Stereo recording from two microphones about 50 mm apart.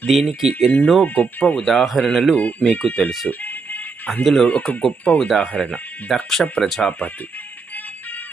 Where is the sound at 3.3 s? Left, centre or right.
Left.